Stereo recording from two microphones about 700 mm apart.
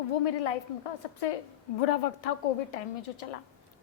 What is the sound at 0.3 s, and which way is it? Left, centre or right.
A woman's voice, left.